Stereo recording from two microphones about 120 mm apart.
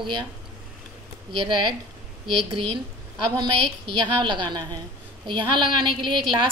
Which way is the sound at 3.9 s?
40° right (ahead or behind).